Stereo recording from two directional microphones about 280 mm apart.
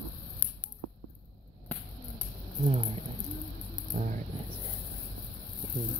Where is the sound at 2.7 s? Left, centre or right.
Right.